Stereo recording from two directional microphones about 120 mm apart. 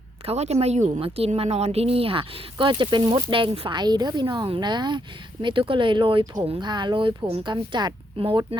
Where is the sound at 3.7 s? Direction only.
35° right (ahead or behind).